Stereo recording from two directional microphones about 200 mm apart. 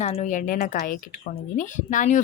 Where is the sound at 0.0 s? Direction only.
35° left (ahead or behind).